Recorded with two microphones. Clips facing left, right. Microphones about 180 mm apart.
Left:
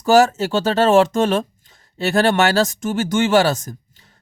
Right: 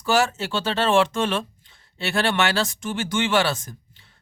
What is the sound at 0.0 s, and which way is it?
Speech, 40° left (ahead or behind).